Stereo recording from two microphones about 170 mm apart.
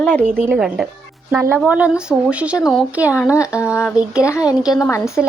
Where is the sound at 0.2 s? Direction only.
10° right (ahead or behind).